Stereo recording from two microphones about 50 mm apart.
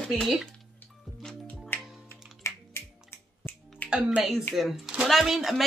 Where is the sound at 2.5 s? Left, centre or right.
Left.